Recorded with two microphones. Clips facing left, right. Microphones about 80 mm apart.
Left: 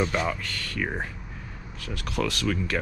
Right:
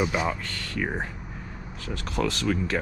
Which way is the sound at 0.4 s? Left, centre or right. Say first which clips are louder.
Left 1 dB; left.